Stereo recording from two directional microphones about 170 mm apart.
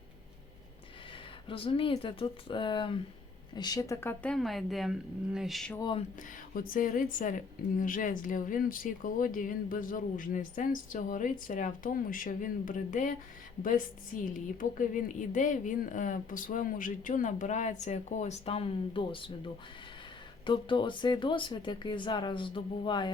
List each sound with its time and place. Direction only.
1.5 s speech: 35° left (ahead or behind); by 5.7 s centre (ahead or behind)
6.5 s a woman's voice: 55° left (ahead or behind); by 19.3 s 30° left (ahead or behind)
20.4 s speech: 30° left (ahead or behind)